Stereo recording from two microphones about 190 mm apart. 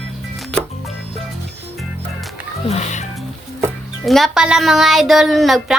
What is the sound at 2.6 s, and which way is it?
Music, 35° left (ahead or behind).